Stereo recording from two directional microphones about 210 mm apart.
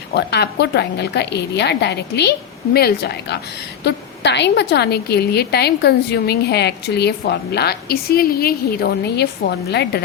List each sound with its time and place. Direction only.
0.1 s a woman's voice: 55° left (ahead or behind)